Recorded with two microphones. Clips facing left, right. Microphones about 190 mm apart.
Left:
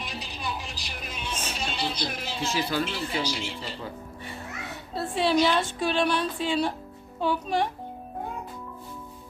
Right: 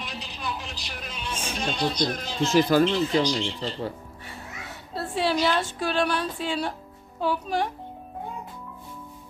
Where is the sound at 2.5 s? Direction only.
50° right (ahead or behind).